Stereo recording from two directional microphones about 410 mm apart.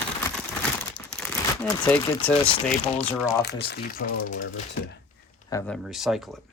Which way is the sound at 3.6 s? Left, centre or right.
Left.